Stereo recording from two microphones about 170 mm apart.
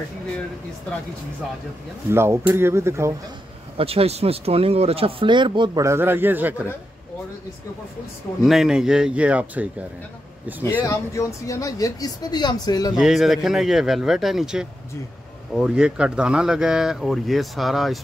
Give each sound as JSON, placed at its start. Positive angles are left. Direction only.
{"t": 2.0, "sound": "speech", "side_deg": -15}
{"t": 3.7, "sound": "speech", "side_deg": -35}
{"t": 5.9, "sound": "speech", "side_deg": -15}
{"t": 8.5, "sound": "speech", "side_deg": -5}
{"t": 10.8, "sound": "speech", "side_deg": 20}
{"t": 12.9, "sound": "speech", "side_deg": -5}